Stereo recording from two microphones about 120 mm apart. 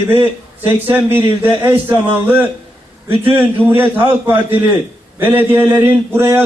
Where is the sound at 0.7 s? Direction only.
15° right (ahead or behind).